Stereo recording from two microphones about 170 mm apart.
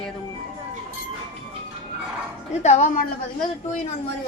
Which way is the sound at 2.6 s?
45° left (ahead or behind).